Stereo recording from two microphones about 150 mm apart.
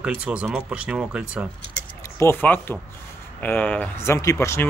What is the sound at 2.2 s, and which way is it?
Speech, 15° left (ahead or behind).